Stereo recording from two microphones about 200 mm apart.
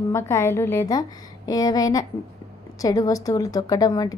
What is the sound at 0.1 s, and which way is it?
A woman's voice, 15° left (ahead or behind).